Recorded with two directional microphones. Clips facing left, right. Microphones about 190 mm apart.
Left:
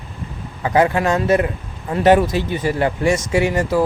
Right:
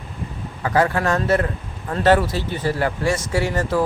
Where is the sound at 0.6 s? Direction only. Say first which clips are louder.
Left 3 dB; 20° left (ahead or behind).